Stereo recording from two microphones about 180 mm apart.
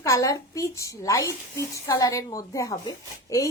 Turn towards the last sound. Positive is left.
turn(degrees=15)  # may be behind; listen again after turning